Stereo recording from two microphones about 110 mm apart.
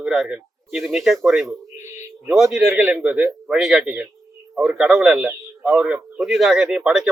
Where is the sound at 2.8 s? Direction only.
20° right (ahead or behind).